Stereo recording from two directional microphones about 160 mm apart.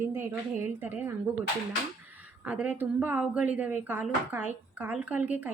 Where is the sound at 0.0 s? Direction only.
15° right (ahead or behind).